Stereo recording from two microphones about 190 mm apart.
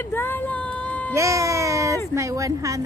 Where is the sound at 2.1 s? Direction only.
15° right (ahead or behind).